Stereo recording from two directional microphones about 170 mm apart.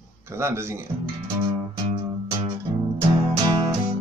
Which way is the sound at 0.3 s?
15° right (ahead or behind).